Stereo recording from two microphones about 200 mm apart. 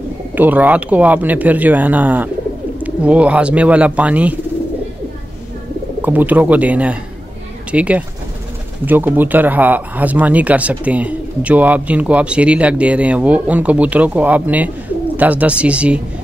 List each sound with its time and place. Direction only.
0.3 s speech: 10° right (ahead or behind)
6.0 s speech: 10° right (ahead or behind)